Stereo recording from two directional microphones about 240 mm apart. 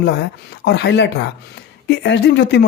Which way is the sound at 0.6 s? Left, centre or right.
Left.